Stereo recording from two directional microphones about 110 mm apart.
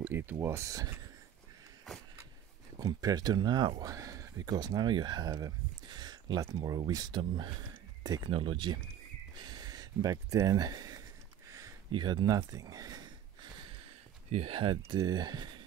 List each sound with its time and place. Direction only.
0.0 s speech: 20° right (ahead or behind)
2.8 s speech: 35° right (ahead or behind)
8.3 s speech: 50° right (ahead or behind)
11.4 s a sound: 30° right (ahead or behind)
11.9 s speech: 45° right (ahead or behind)
12.4 s a sound: 30° right (ahead or behind)
14.3 s speech: 60° right (ahead or behind)
15.0 s speech: 40° right (ahead or behind)